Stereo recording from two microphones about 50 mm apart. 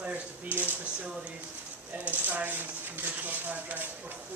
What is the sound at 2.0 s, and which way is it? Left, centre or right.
Speech, right.